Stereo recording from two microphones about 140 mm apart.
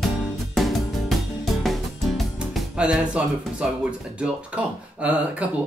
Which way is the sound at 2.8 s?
5° right (ahead or behind).